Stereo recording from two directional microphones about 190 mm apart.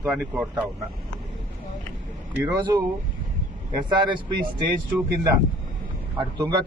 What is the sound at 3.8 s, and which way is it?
Speech, 25° right (ahead or behind).